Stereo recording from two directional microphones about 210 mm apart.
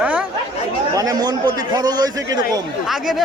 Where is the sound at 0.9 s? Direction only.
15° right (ahead or behind).